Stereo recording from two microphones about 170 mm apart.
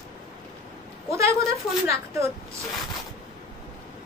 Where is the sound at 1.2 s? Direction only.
15° right (ahead or behind).